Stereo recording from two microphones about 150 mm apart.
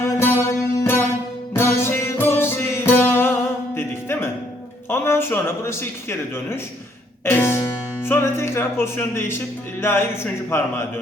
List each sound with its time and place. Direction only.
0.0 s music: 15° left (ahead or behind)
4.9 s speech: 15° left (ahead or behind)
7.3 s music: 15° left (ahead or behind)
10.5 s a man's voice: 15° left (ahead or behind)